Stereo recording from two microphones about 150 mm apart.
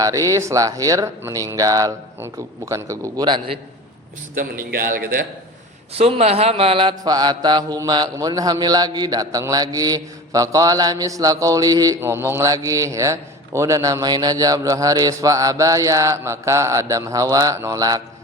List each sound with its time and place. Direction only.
0.0 s mantra: 20° right (ahead or behind)
4.4 s a man's voice: 70° right (ahead or behind)
5.9 s mantra: 40° right (ahead or behind); by 18.0 s 25° right (ahead or behind)